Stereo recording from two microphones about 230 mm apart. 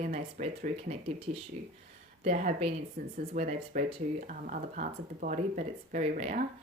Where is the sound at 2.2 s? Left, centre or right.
Right.